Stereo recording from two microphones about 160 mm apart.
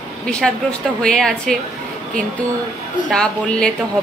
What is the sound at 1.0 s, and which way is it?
Speech, 5° left (ahead or behind).